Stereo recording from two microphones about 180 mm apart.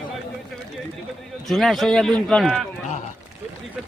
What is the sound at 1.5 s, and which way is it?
A man's voice, centre (ahead or behind).